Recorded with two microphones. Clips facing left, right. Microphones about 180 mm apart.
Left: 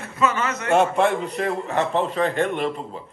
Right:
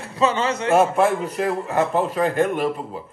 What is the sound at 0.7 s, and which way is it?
Speech, centre (ahead or behind).